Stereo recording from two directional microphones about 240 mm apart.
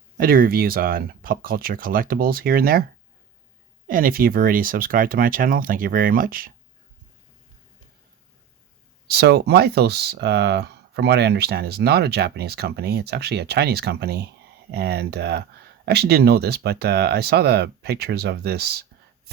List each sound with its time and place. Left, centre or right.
0.2 s speech: right
3.8 s speech: right
9.0 s speech: right